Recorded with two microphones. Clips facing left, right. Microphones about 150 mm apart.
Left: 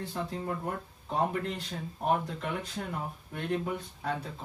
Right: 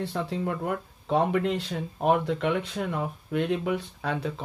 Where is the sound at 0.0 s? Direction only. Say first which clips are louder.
Right 6 dB; 80° right.